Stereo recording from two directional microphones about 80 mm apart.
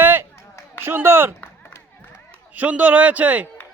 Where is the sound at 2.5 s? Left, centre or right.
Centre.